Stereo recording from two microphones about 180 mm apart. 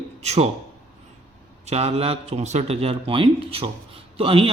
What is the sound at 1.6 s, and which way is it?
A man's voice, 35° right (ahead or behind).